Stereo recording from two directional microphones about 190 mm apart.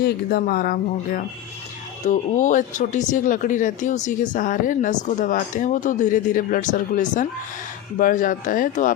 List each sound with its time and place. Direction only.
0.0 s speech: 55° left (ahead or behind)